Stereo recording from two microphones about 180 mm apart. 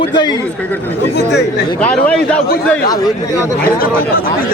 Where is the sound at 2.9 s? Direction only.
20° left (ahead or behind).